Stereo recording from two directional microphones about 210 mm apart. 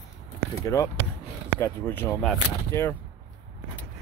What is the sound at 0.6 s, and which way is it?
Speech, 15° left (ahead or behind).